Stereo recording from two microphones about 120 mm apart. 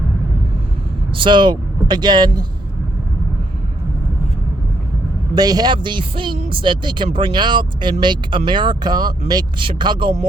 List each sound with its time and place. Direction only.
1.1 s speech: 45° right (ahead or behind)
5.3 s speech: 35° right (ahead or behind)